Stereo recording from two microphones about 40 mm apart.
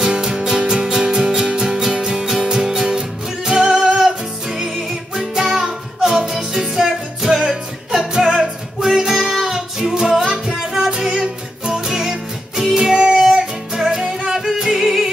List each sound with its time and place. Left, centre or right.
0.0 s music: right